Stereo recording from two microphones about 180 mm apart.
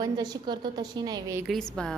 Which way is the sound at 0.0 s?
20° right (ahead or behind).